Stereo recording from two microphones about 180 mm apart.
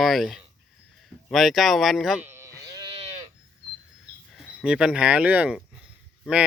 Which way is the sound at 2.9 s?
35° right (ahead or behind).